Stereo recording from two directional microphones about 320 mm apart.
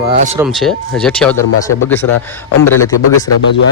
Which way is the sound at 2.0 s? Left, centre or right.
Left.